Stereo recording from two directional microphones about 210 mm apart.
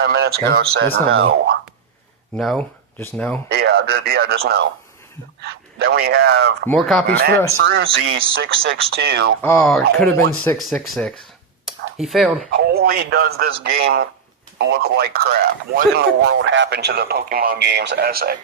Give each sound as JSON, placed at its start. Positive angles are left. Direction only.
{"t": 0.0, "sound": "speech", "side_deg": -50}
{"t": 2.3, "sound": "speech", "side_deg": 0}
{"t": 3.5, "sound": "speech", "side_deg": -50}
{"t": 6.7, "sound": "speech", "side_deg": 0}
{"t": 7.1, "sound": "speech", "side_deg": -50}
{"t": 7.6, "sound": "speech", "side_deg": -60}
{"t": 9.4, "sound": "speech", "side_deg": 5}
{"t": 11.6, "sound": "a sound", "side_deg": 0}
{"t": 12.5, "sound": "speech", "side_deg": -50}